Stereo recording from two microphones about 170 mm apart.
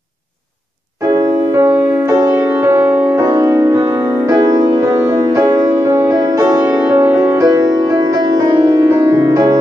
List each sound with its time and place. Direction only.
1.0 s music: 20° right (ahead or behind)